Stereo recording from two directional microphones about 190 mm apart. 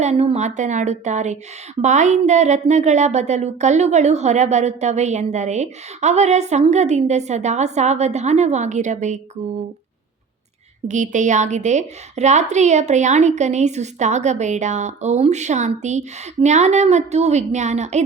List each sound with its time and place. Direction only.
0.0 s speech: 35° right (ahead or behind)
10.8 s speech: 40° right (ahead or behind)